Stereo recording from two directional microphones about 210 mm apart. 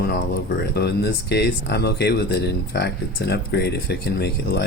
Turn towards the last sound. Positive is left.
turn(degrees=50)  # may be behind; listen again after turning